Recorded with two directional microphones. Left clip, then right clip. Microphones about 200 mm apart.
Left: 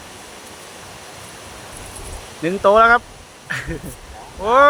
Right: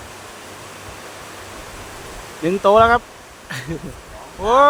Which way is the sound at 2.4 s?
20° right (ahead or behind).